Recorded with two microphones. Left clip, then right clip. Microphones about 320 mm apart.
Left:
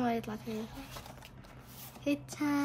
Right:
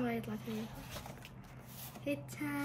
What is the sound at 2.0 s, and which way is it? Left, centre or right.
Speech, centre.